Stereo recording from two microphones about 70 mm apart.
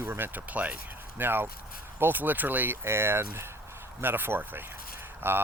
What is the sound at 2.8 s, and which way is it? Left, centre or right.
Speech, right.